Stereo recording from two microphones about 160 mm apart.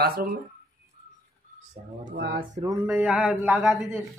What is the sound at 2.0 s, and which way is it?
Speech, 75° right (ahead or behind).